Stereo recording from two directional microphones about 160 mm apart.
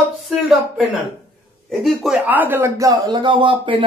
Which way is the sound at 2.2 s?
10° right (ahead or behind).